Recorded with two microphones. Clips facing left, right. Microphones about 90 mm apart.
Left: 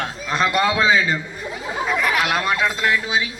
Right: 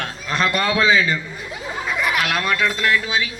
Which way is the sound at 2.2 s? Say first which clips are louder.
Left 1 dB; 20° left (ahead or behind).